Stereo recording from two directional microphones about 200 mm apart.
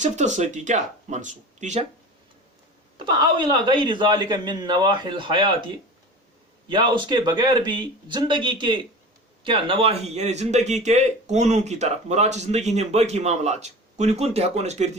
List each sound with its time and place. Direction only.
0.0 s speech: 35° right (ahead or behind)
3.0 s speech: 25° right (ahead or behind)
6.7 s speech: 25° right (ahead or behind)